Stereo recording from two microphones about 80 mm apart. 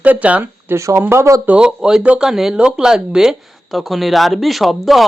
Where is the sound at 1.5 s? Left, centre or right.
Centre.